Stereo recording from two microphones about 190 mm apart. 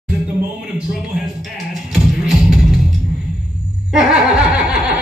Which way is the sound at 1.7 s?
Centre (ahead or behind).